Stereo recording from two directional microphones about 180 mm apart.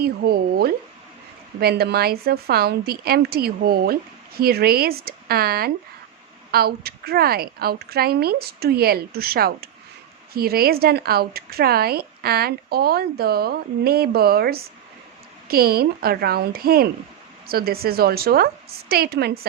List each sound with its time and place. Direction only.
0.0 s speech: 60° right (ahead or behind)